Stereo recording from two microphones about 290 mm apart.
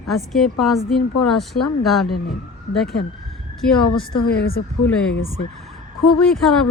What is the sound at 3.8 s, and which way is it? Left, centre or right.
Speech, left.